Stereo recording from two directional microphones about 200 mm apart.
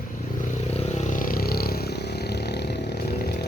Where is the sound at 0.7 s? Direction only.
35° left (ahead or behind).